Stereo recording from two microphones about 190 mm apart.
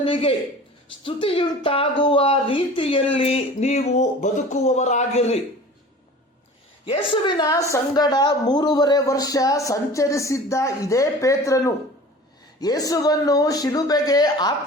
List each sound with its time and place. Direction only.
0.0 s a man's voice: 30° left (ahead or behind)
6.8 s a woman's voice: 30° left (ahead or behind)